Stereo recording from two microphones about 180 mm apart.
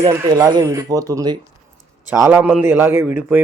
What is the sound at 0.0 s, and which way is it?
Speech, 20° right (ahead or behind).